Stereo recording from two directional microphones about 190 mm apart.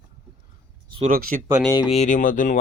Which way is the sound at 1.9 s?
35° left (ahead or behind).